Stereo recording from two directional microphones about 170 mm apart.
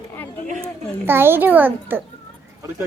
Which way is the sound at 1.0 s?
15° right (ahead or behind).